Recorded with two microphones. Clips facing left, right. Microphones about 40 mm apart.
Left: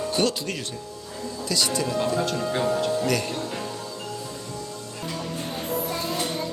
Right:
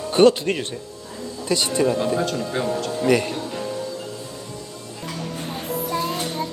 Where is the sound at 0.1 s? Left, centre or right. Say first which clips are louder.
Right 13 dB; right.